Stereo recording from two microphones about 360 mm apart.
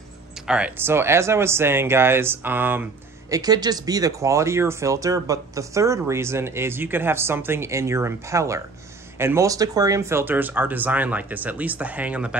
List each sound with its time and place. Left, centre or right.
0.5 s speech: centre